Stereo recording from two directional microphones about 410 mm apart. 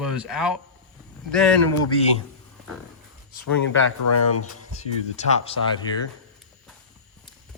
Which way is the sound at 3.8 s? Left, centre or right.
Left.